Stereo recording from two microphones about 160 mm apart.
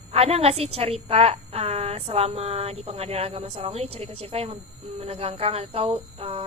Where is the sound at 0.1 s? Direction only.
40° right (ahead or behind).